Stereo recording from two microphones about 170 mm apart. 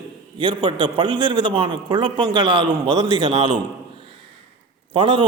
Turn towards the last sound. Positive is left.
turn(degrees=-30)  # may be behind; listen again after turning